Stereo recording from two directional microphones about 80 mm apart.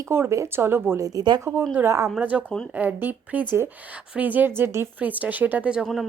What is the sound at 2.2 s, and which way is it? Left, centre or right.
Speech, centre.